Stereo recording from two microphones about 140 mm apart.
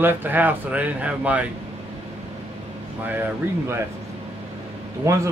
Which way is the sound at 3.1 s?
15° right (ahead or behind).